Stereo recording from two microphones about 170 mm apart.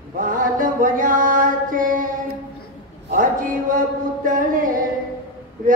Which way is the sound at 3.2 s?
50° right (ahead or behind).